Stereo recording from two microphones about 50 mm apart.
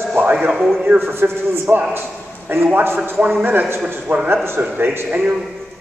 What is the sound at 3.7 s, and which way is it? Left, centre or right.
Speech, right.